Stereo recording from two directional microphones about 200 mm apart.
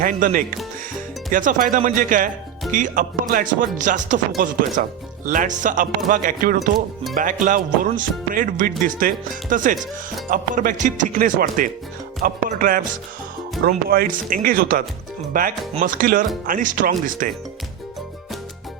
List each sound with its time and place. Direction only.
0.0 s speech: 40° right (ahead or behind)